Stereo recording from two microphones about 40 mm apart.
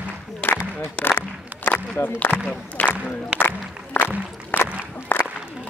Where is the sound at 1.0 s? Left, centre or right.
Left.